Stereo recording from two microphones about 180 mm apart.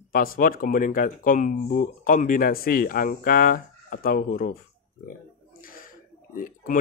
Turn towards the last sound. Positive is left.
turn(degrees=50)  # may be behind; listen again after turning